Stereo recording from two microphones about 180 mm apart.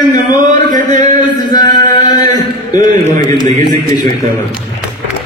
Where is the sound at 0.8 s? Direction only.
45° right (ahead or behind).